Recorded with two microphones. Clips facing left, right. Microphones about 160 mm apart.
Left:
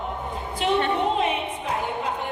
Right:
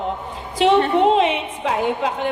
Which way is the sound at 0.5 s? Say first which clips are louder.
Right 8 dB; 90° right.